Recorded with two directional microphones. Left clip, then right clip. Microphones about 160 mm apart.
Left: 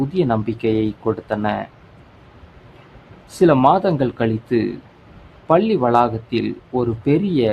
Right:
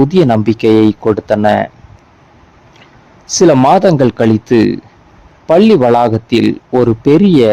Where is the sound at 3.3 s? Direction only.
45° right (ahead or behind).